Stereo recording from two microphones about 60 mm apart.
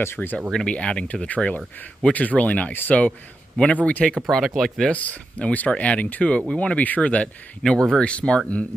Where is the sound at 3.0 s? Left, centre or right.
Centre.